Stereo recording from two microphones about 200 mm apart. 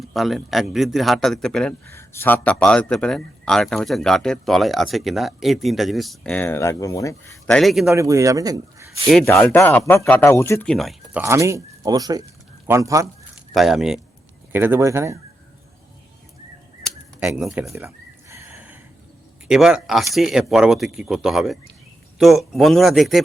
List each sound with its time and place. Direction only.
0.0 s a man's voice: centre (ahead or behind); by 7.5 s 15° left (ahead or behind)
7.5 s a man's voice: centre (ahead or behind)
7.9 s speech: 15° right (ahead or behind)
9.2 s speech: 10° left (ahead or behind)
11.2 s a man's voice: 15° right (ahead or behind)
13.5 s a man's voice: centre (ahead or behind)
16.8 s a sound: 5° right (ahead or behind)
19.5 s a man's voice: 5° right (ahead or behind)